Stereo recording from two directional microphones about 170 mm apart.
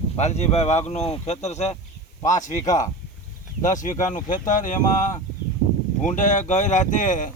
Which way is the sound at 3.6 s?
50° left (ahead or behind).